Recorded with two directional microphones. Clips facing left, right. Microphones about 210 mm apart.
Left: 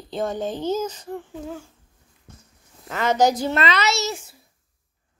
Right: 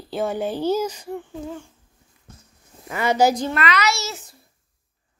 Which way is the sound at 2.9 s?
10° right (ahead or behind).